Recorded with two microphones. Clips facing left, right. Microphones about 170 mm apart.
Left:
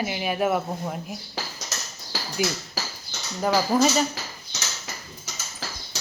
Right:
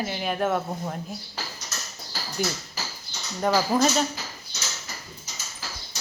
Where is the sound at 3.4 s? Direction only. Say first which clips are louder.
Left 1 dB; 5° left (ahead or behind).